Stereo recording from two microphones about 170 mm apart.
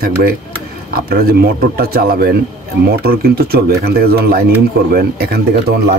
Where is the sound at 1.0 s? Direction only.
60° right (ahead or behind).